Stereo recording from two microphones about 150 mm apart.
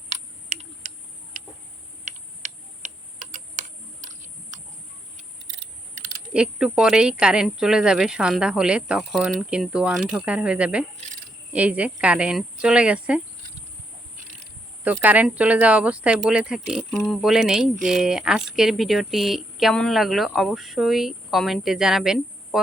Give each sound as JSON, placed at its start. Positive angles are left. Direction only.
{"t": 0.1, "sound": "a sound", "side_deg": -50}
{"t": 2.0, "sound": "typing", "side_deg": -55}
{"t": 6.3, "sound": "speech", "side_deg": -5}
{"t": 10.9, "sound": "speech", "side_deg": -50}
{"t": 11.5, "sound": "speech", "side_deg": -10}
{"t": 14.8, "sound": "speech", "side_deg": -10}